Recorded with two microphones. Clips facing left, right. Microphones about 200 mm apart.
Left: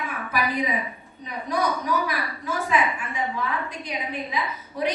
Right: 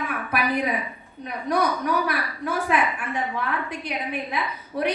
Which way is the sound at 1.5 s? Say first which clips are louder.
Right 2 dB; 60° right (ahead or behind).